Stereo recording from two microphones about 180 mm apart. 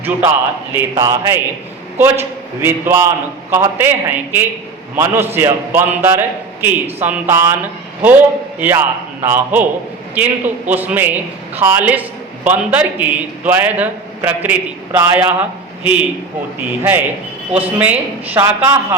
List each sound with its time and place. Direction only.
0.7 s a man's voice: 15° right (ahead or behind)
2.6 s a man's voice: 15° right (ahead or behind)